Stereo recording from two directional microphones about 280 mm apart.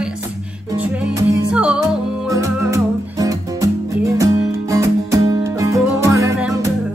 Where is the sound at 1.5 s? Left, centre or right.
Centre.